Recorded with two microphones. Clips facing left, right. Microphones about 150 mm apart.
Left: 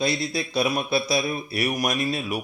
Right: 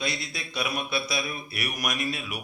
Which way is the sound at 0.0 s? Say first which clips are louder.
Left 8 dB; 35° left (ahead or behind).